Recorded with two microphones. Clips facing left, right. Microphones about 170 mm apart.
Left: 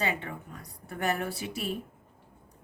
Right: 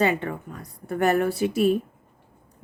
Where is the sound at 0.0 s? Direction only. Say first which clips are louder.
Right 9 dB; 55° right (ahead or behind).